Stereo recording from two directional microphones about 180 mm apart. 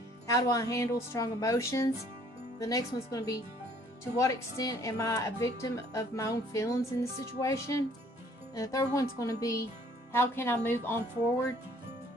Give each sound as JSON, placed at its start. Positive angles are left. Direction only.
{"t": 0.3, "sound": "a woman's voice", "side_deg": 20}